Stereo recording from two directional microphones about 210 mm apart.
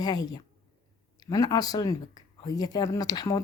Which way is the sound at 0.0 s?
20° left (ahead or behind).